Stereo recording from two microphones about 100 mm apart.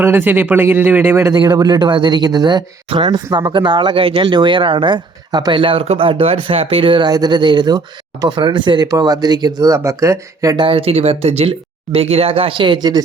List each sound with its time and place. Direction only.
0.0 s speech: 20° right (ahead or behind)
1.3 s speech: 40° right (ahead or behind)
9.6 s speech: 35° right (ahead or behind)
10.6 s speech: 65° right (ahead or behind); by 13.0 s 50° right (ahead or behind)